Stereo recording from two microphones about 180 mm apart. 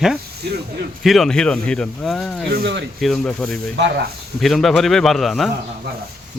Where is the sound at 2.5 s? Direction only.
70° right (ahead or behind).